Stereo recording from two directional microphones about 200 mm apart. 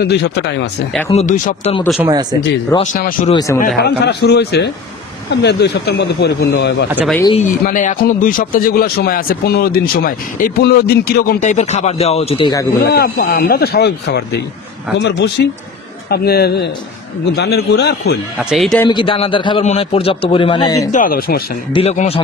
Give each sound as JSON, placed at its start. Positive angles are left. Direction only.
{"t": 0.0, "sound": "speech", "side_deg": 55}
{"t": 1.1, "sound": "speech", "side_deg": 40}
{"t": 2.8, "sound": "a man's voice", "side_deg": 40}
{"t": 7.3, "sound": "a man's voice", "side_deg": 40}
{"t": 12.9, "sound": "a man's voice", "side_deg": 50}
{"t": 18.4, "sound": "speech", "side_deg": 0}
{"t": 18.9, "sound": "a man's voice", "side_deg": 25}
{"t": 20.9, "sound": "a man's voice", "side_deg": 45}
{"t": 21.7, "sound": "speech", "side_deg": 30}